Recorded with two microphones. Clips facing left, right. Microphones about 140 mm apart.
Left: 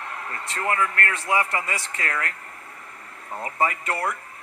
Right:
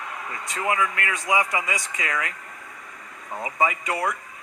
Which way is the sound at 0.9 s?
55° left (ahead or behind).